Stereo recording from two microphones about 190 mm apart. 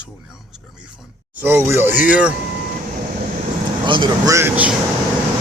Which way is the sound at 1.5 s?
15° right (ahead or behind).